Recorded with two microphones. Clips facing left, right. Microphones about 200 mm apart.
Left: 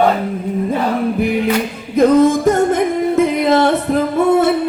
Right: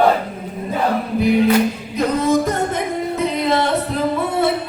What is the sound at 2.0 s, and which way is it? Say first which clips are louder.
Music: left 7 dB; 50° left (ahead or behind).